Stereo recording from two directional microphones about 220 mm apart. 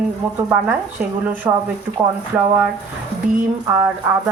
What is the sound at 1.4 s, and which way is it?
Speech, 15° right (ahead or behind).